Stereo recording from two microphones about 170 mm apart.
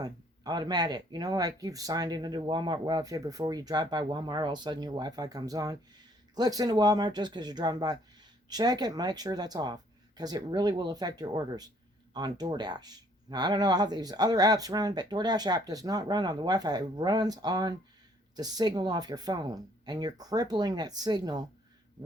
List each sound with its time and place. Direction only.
0.0 s speech: 25° right (ahead or behind)